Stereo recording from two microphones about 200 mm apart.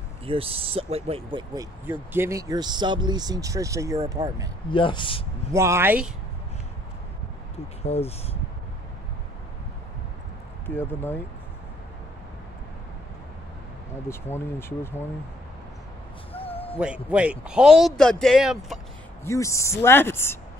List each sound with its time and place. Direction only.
0.2 s speech: 30° right (ahead or behind)
4.6 s speech: 25° left (ahead or behind)
5.5 s speech: 15° right (ahead or behind)
7.8 s speech: 30° left (ahead or behind)
10.8 s speech: 10° left (ahead or behind)
14.0 s speech: 10° left (ahead or behind)
16.3 s a sound: 30° left (ahead or behind)
16.8 s speech: 5° right (ahead or behind)
19.2 s speech: 15° left (ahead or behind)